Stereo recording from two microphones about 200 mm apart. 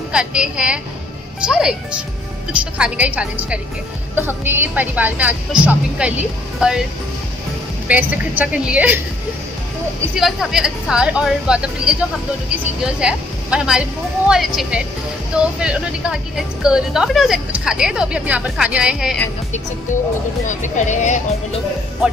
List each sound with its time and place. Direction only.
0.1 s a woman's voice: 5° right (ahead or behind)
7.9 s speech: 5° right (ahead or behind)
10.1 s a woman's voice: centre (ahead or behind)
13.0 s a woman's voice: 5° right (ahead or behind)
20.4 s speech: 35° left (ahead or behind)